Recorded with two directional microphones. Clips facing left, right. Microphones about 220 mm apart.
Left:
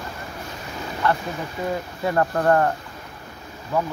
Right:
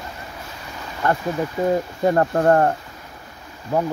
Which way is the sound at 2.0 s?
35° right (ahead or behind).